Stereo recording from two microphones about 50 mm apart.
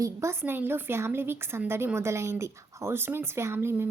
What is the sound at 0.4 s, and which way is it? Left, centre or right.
A woman's voice, right.